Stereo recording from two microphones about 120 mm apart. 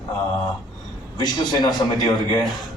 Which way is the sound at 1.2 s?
35° left (ahead or behind).